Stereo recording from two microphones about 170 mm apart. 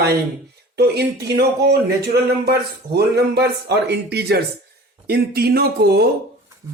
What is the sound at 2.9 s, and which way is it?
Speech, 70° right (ahead or behind).